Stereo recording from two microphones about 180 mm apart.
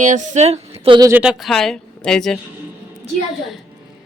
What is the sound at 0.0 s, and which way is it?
Speech, 40° right (ahead or behind).